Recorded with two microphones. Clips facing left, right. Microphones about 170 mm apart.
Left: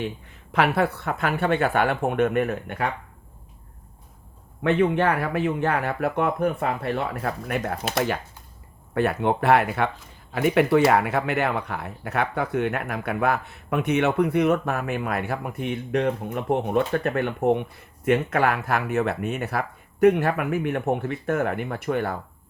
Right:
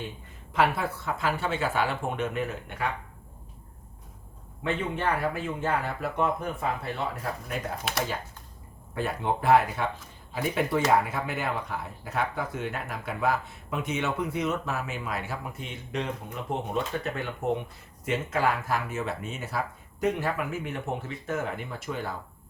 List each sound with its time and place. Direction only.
0.5 s speech: 70° left (ahead or behind)
4.6 s speech: 65° left (ahead or behind)
9.0 s speech: 65° left (ahead or behind)